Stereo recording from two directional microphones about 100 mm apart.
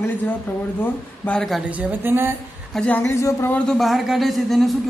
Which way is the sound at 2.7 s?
15° left (ahead or behind).